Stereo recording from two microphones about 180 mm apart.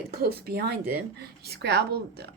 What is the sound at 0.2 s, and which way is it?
A woman's voice, 60° right (ahead or behind).